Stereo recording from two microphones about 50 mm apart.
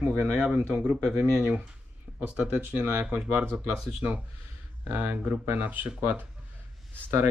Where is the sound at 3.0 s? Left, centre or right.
Right.